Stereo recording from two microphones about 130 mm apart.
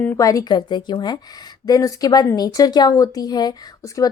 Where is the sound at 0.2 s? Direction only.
25° left (ahead or behind).